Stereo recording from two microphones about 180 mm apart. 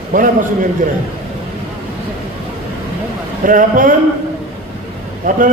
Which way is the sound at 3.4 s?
50° right (ahead or behind).